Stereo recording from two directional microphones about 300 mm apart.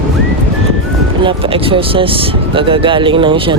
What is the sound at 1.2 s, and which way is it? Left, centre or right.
Speech, centre.